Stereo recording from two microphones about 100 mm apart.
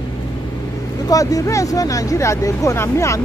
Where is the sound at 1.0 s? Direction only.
35° left (ahead or behind).